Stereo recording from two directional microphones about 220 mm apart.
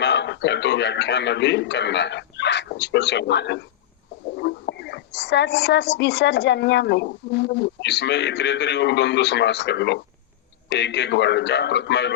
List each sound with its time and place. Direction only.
0.0 s a man's voice: 50° left (ahead or behind)